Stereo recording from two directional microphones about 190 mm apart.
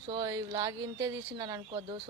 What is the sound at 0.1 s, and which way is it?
Speech, 20° right (ahead or behind).